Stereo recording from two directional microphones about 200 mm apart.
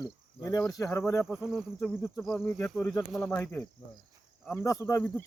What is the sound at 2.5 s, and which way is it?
Speech, 10° left (ahead or behind).